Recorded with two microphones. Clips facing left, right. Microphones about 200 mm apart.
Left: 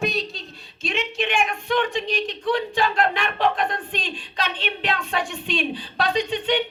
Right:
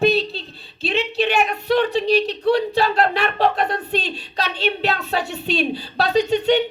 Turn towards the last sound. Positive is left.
turn(degrees=-40)  # may be behind; listen again after turning